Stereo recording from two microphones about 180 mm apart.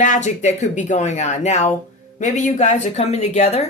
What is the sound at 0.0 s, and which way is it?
Speech, 45° left (ahead or behind).